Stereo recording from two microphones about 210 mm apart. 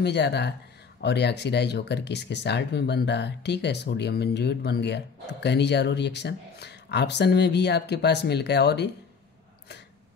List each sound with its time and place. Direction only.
0.0 s speech: 55° left (ahead or behind)